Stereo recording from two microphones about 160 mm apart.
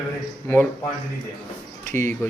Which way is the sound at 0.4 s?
10° left (ahead or behind).